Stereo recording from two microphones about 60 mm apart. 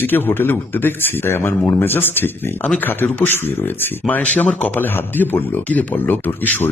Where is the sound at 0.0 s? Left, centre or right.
Left.